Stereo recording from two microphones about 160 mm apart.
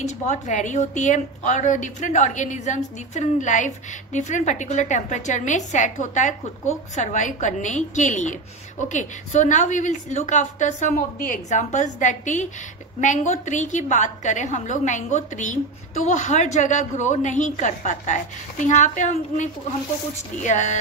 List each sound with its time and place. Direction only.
0.3 s a woman's voice: 50° left (ahead or behind)